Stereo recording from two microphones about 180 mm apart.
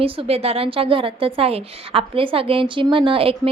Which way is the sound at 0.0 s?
30° right (ahead or behind).